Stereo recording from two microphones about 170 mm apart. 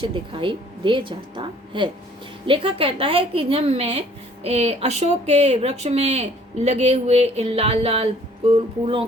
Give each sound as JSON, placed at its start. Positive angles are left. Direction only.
{"t": 0.0, "sound": "speech", "side_deg": -30}